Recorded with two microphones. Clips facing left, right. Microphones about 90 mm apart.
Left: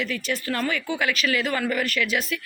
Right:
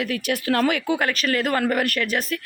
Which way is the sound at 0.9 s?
45° right (ahead or behind).